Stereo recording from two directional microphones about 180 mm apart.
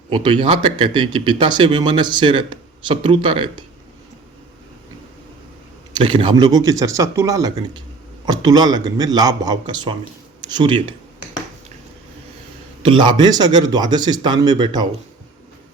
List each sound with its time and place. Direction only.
0.1 s speech: 30° right (ahead or behind)
5.9 s speech: 25° right (ahead or behind)
12.8 s speech: 25° right (ahead or behind)